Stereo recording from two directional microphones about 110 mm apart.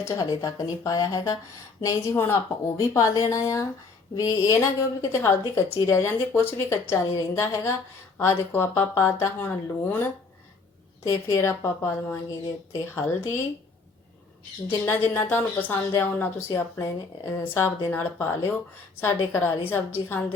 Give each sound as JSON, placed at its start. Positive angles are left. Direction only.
{"t": 0.0, "sound": "speech", "side_deg": 30}
{"t": 11.1, "sound": "speech", "side_deg": 25}
{"t": 14.8, "sound": "speech", "side_deg": 20}